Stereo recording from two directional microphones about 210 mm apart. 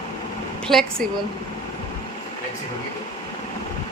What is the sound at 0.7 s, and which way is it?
Speech, centre (ahead or behind).